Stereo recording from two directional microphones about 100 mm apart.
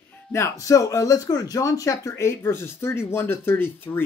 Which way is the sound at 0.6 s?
35° left (ahead or behind).